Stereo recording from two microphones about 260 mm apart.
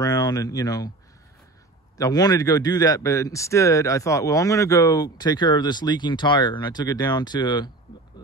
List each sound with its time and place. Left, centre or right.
0.0 s speech: centre
2.0 s a man's voice: centre